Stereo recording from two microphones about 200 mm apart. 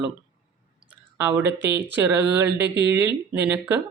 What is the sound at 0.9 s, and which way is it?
Clicking, 10° right (ahead or behind).